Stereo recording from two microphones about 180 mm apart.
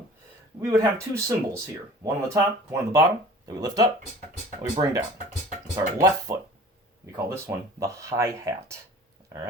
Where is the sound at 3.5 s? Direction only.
20° right (ahead or behind).